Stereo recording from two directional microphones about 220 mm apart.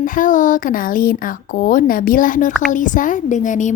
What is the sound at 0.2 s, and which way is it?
Speech, 35° left (ahead or behind).